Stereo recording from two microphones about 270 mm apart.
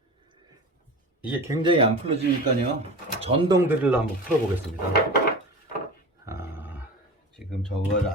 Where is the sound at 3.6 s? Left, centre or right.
Centre.